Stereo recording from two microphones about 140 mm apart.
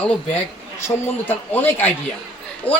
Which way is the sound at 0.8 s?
15° left (ahead or behind).